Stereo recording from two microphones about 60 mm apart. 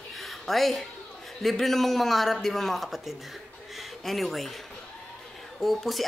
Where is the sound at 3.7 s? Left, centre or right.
Centre.